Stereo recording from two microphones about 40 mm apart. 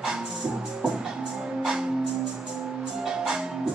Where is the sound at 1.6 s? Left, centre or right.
Centre.